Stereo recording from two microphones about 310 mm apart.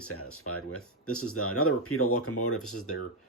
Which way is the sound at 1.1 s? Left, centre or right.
Left.